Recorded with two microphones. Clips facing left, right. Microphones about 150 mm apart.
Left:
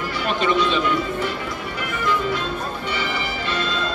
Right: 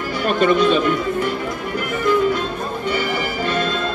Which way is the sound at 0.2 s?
50° right (ahead or behind).